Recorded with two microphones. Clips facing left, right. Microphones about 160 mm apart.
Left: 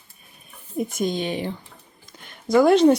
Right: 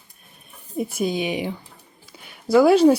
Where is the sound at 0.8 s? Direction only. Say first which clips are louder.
Right 1 dB; 5° right (ahead or behind).